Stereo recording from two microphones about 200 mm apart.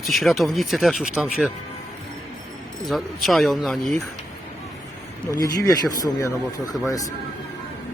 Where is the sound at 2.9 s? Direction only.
Centre (ahead or behind).